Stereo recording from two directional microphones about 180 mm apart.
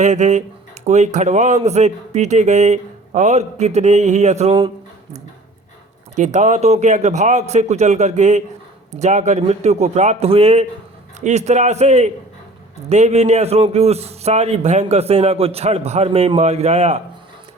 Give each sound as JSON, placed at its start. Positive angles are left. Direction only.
{"t": 0.0, "sound": "a man's voice", "side_deg": -40}
{"t": 6.1, "sound": "a man's voice", "side_deg": -40}